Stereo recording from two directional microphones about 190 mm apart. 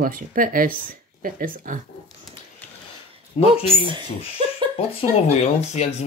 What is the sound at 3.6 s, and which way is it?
Speech, 25° right (ahead or behind).